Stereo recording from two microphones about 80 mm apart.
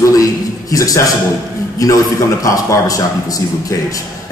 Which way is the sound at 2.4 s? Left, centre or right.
Left.